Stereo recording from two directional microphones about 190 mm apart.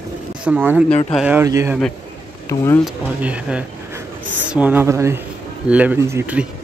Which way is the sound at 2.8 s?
5° right (ahead or behind).